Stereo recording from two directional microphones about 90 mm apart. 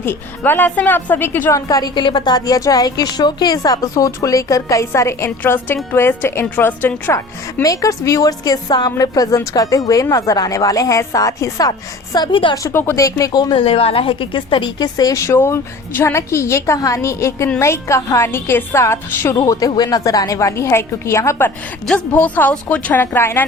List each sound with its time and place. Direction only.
0.0 s a woman's voice: 25° left (ahead or behind)
1.5 s a woman's voice: 40° left (ahead or behind)
2.0 s a woman's voice: 60° left (ahead or behind); by 7.2 s 25° left (ahead or behind)
7.6 s a woman's voice: 40° left (ahead or behind)
12.3 s a woman's voice: 70° left (ahead or behind)
12.6 s a woman's voice: 25° left (ahead or behind)
13.0 s a woman's voice: 40° left (ahead or behind)
13.6 s a woman's voice: 90° left; by 14.8 s 65° left (ahead or behind)
14.9 s a woman's voice: 40° left (ahead or behind)
21.8 s a woman's voice: 15° left (ahead or behind)